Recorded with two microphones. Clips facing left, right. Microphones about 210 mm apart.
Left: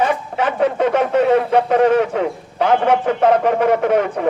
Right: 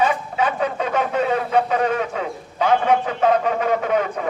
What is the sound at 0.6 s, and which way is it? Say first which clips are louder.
A man's voice: left 6 dB; 65° left (ahead or behind).